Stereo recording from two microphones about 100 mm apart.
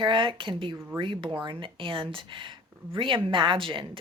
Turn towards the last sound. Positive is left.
turn(degrees=-55)  # may be behind; listen again after turning